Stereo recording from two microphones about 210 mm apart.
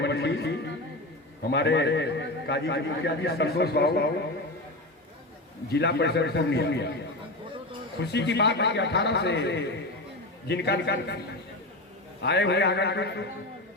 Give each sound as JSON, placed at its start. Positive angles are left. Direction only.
{"t": 0.0, "sound": "a sound", "side_deg": 55}
{"t": 1.5, "sound": "a man's voice", "side_deg": 55}
{"t": 5.7, "sound": "a man's voice", "side_deg": 55}
{"t": 8.0, "sound": "a man's voice", "side_deg": 55}
{"t": 12.2, "sound": "a man's voice", "side_deg": 55}